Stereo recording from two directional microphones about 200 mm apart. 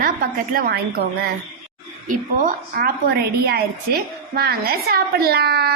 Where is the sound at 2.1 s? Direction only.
45° right (ahead or behind).